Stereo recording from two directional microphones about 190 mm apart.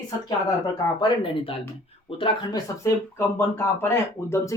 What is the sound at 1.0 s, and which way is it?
Speech, 25° left (ahead or behind).